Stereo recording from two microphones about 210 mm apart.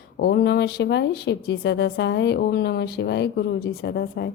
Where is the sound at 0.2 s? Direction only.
50° left (ahead or behind).